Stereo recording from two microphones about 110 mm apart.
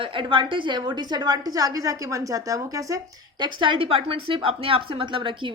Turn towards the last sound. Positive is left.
turn(degrees=-50)  # may be behind; listen again after turning